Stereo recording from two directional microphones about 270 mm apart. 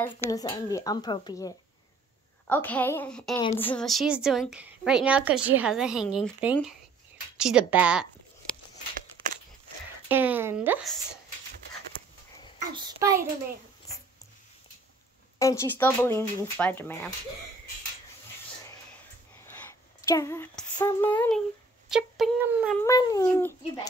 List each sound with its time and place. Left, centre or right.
0.2 s a woman's voice: centre
10.0 s speech: centre
12.5 s speech: centre
15.3 s speech: centre
20.0 s speech: centre
22.8 s speech: centre